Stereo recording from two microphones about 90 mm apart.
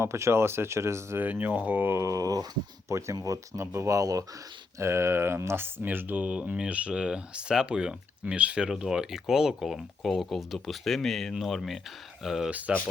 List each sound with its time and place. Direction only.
0.0 s speech: 30° right (ahead or behind)
1.2 s speech: 20° right (ahead or behind)
12.5 s speech: 15° right (ahead or behind)